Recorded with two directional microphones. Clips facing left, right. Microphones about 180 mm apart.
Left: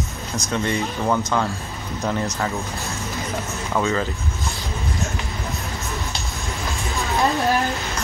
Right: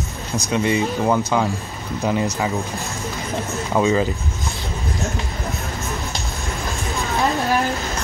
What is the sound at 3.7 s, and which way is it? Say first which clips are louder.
Speech: right 4 dB; 15° right (ahead or behind).